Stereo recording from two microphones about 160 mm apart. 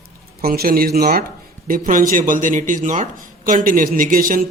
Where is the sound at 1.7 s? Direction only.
60° right (ahead or behind).